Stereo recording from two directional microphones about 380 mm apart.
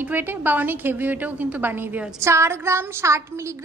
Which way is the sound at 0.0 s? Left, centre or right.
Centre.